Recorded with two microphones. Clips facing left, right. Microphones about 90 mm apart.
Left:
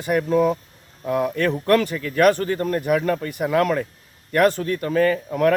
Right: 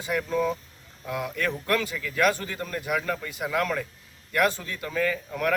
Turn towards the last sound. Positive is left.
turn(degrees=65)  # may be behind; listen again after turning